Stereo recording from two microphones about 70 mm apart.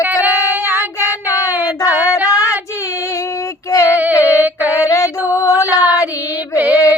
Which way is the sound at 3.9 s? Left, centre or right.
Right.